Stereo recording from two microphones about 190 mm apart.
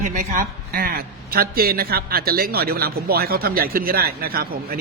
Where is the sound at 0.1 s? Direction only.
45° right (ahead or behind).